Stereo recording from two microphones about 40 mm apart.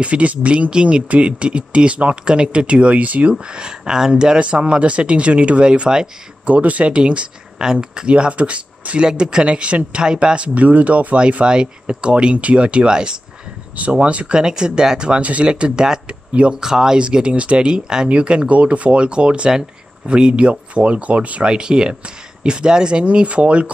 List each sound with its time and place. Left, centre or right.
0.0 s speech: right
3.5 s speech: centre
6.4 s speech: right; by 13.2 s centre
13.7 s speech: right
14.4 s speech: centre
17.0 s speech: right
21.5 s speech: right
23.0 s speech: right